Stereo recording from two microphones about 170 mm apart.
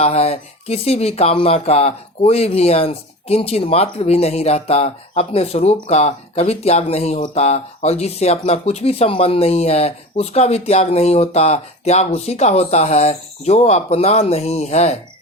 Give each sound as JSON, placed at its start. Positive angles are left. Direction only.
{"t": 0.0, "sound": "speech", "side_deg": 35}